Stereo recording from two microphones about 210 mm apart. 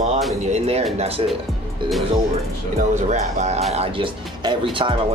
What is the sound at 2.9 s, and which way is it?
Speech, 35° right (ahead or behind).